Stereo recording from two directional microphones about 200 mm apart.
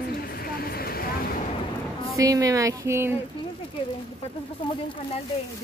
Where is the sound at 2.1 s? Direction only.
15° right (ahead or behind).